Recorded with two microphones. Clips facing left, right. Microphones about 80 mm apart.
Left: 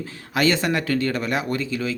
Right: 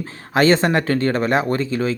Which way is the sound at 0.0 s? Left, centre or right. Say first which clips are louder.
Right 5 dB; right.